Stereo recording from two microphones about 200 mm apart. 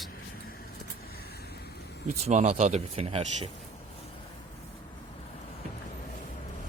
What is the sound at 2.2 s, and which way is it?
Speech, 30° right (ahead or behind).